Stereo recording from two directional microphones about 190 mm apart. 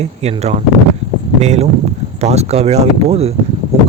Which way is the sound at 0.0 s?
35° right (ahead or behind).